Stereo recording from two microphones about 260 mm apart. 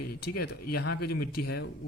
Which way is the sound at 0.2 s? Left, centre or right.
Left.